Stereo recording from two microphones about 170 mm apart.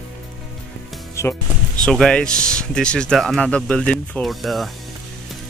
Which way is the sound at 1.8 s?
5° left (ahead or behind).